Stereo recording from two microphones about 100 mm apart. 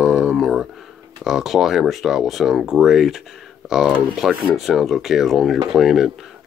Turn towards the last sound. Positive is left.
turn(degrees=-5)  # may be behind; listen again after turning